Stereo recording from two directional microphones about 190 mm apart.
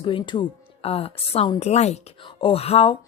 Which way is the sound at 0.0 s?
25° left (ahead or behind).